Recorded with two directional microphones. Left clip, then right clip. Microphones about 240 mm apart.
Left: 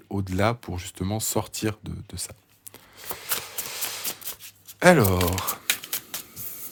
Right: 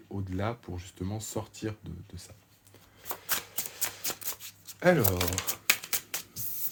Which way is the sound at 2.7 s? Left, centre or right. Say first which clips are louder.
Left 4 dB; left.